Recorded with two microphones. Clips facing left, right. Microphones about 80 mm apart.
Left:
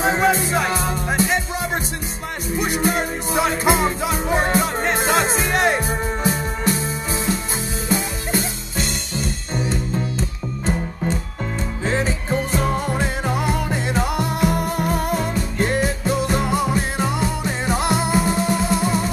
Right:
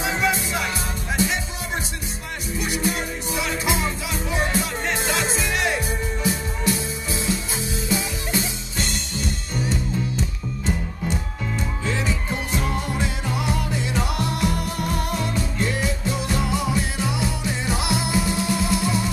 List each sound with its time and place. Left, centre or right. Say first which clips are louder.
0.0 s music: left 5 dB; left
2.5 s music: left 5 dB; left
9.6 s music: left 2 dB; left